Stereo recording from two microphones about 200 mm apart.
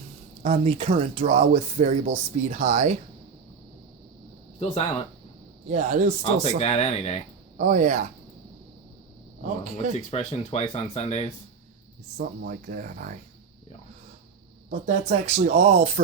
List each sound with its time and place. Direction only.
0.4 s speech: 30° right (ahead or behind)
4.6 s speech: 30° left (ahead or behind)
5.6 s speech: 40° right (ahead or behind)
6.6 s speech: 30° left (ahead or behind)
7.6 s speech: 40° right (ahead or behind)
9.9 s speech: 30° left (ahead or behind)
12.1 s speech: 50° right (ahead or behind)
14.7 s speech: 40° right (ahead or behind)